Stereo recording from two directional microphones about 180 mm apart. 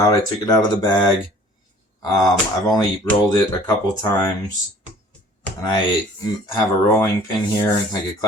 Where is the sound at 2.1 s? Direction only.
20° left (ahead or behind).